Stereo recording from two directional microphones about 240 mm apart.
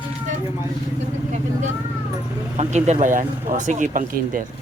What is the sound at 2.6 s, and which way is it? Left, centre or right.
Speech, right.